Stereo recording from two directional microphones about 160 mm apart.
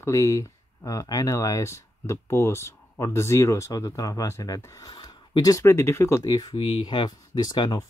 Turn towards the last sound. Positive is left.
turn(degrees=25)  # may be behind; listen again after turning